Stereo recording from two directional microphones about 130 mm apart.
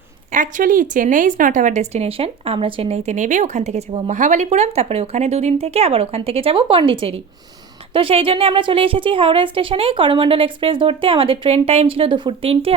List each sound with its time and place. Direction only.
0.3 s a woman's voice: 85° right; by 4.1 s 50° right (ahead or behind)
4.1 s a woman's voice: 65° right (ahead or behind); by 12.7 s 45° right (ahead or behind)